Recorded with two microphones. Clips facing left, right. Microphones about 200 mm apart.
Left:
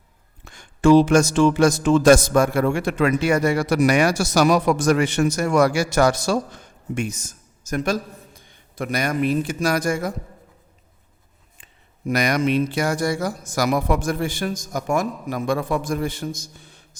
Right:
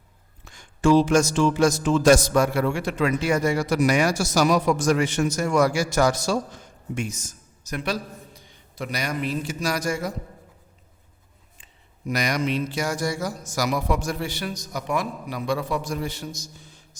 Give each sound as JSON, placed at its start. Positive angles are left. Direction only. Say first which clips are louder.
{"t": 0.4, "sound": "speech", "louder": "left 4 dB", "side_deg": 60}
{"t": 12.0, "sound": "speech", "louder": "left 5 dB", "side_deg": 55}